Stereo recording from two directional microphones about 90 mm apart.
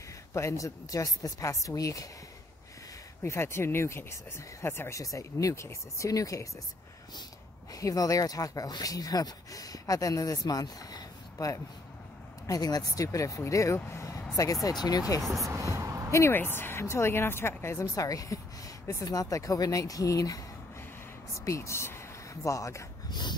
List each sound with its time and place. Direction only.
0.3 s speech: 35° left (ahead or behind)
3.2 s speech: 30° left (ahead or behind)
7.7 s speech: 40° left (ahead or behind)
13.7 s vehicle: 30° left (ahead or behind)
14.3 s speech: 40° left (ahead or behind)
15.3 s a sound: 35° right (ahead or behind)
16.1 s a woman's voice: 30° left (ahead or behind)
21.5 s speech: 30° left (ahead or behind)
23.0 s dog: 55° left (ahead or behind)